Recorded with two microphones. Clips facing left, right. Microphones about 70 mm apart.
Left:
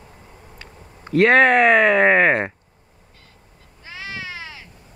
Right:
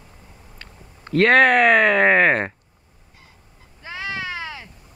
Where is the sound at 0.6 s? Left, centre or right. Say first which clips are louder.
Even; centre.